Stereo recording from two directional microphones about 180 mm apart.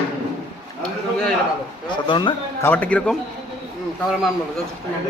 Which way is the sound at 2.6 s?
10° left (ahead or behind).